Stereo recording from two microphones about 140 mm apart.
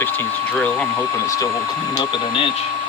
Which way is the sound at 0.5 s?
10° left (ahead or behind).